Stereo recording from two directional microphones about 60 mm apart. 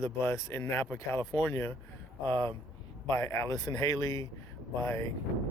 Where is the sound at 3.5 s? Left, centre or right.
Left.